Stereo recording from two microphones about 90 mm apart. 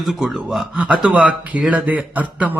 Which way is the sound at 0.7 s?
15° right (ahead or behind).